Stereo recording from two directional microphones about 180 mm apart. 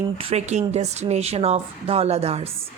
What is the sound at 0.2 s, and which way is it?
Speech, 35° right (ahead or behind).